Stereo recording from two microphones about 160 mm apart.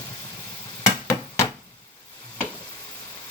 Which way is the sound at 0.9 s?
20° left (ahead or behind).